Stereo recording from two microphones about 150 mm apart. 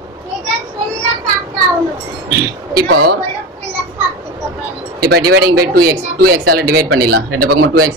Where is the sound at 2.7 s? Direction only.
90° right.